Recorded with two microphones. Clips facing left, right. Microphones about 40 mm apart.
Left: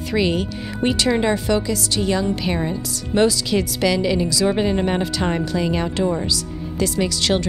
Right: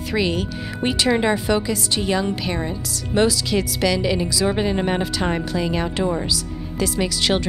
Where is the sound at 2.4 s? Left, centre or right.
Centre.